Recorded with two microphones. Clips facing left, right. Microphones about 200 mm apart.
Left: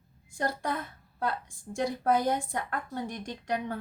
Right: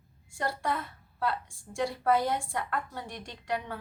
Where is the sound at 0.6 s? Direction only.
45° left (ahead or behind).